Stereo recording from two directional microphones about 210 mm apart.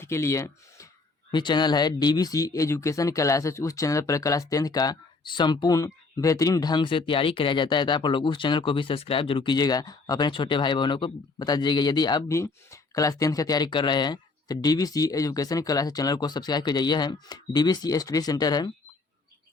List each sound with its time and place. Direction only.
0.0 s speech: 15° left (ahead or behind)